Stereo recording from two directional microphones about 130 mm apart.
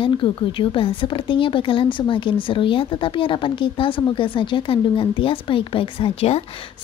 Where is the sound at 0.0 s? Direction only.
40° left (ahead or behind).